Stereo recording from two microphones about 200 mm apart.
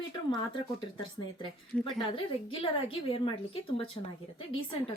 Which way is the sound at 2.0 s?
25° left (ahead or behind).